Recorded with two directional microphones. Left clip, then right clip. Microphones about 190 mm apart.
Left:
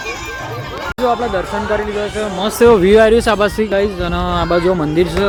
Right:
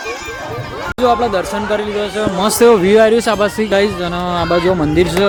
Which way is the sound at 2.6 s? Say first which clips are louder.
Left 1 dB; centre (ahead or behind).